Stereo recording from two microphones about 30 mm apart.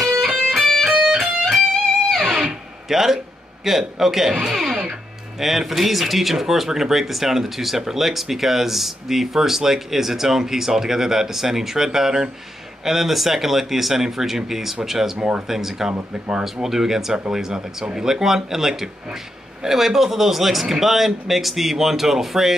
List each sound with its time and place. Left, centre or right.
0.0 s music: centre
0.9 s music: centre
1.4 s music: centre
2.9 s a man's voice: centre
15.1 s speech: right
15.4 s speech: centre